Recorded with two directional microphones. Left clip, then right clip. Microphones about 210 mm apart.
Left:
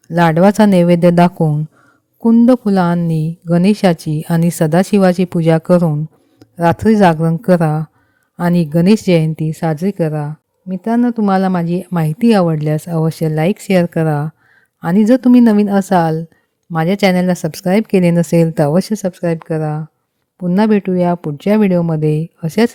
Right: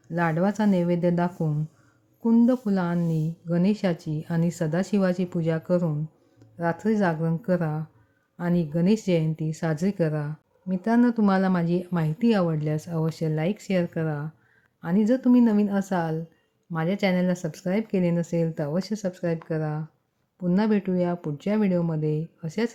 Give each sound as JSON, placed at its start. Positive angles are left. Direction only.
{"t": 0.1, "sound": "a woman's voice", "side_deg": 50}